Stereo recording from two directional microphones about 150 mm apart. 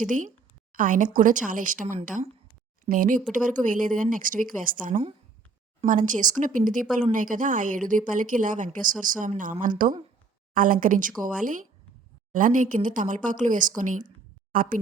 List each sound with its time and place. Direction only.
0.7 s a woman's voice: 65° right (ahead or behind)
2.8 s a woman's voice: 65° right (ahead or behind)